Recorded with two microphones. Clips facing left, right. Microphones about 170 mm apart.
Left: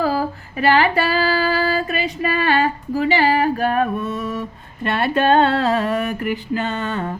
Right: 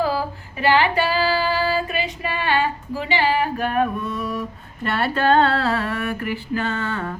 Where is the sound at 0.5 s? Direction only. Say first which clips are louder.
Left 2 dB; 45° left (ahead or behind).